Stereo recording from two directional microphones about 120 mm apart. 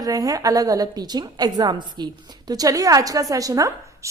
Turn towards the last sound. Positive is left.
turn(degrees=-25)  # may be behind; listen again after turning